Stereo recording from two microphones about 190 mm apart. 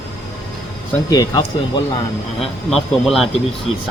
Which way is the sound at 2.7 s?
Centre (ahead or behind).